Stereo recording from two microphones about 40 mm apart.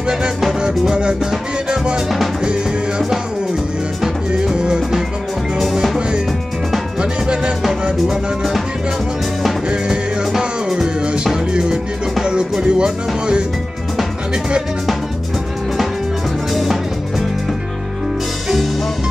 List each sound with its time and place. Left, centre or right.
0.6 s music: right
4.6 s music: right
5.6 s music: centre
7.0 s music: right
10.3 s music: centre
12.3 s music: right